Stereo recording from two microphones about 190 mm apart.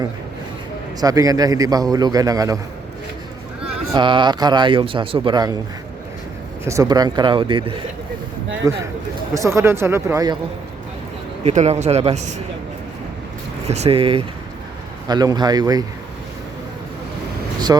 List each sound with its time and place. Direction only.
1.0 s a man's voice: 20° right (ahead or behind)
3.9 s a man's voice: 25° right (ahead or behind)
6.7 s a man's voice: 20° right (ahead or behind)
11.4 s a man's voice: 35° right (ahead or behind)
13.7 s a man's voice: 35° right (ahead or behind)
17.7 s speech: 15° right (ahead or behind)